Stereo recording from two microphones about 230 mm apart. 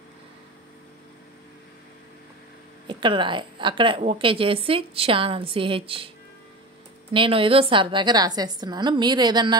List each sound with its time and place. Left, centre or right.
2.9 s a woman's voice: right
7.1 s a woman's voice: right